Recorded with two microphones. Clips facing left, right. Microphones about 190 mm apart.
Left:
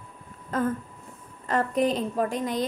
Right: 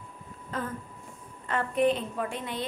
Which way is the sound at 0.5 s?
45° left (ahead or behind).